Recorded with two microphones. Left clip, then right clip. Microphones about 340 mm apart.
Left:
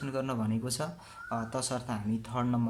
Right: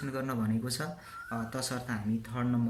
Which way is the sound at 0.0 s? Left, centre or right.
Centre.